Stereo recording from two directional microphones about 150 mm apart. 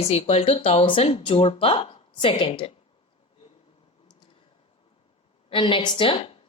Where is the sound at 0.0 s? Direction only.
45° left (ahead or behind).